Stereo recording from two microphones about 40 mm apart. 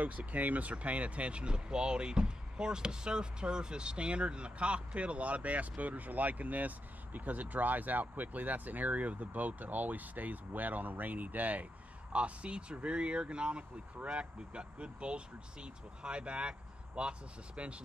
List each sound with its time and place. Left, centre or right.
0.0 s speech: right
12.1 s speech: right